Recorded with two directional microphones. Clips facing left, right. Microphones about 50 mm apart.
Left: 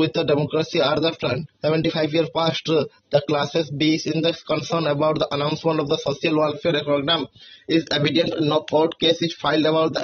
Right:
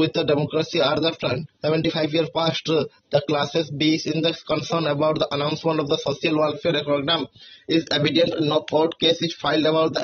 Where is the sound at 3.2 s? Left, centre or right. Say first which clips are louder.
Left 1 dB; left.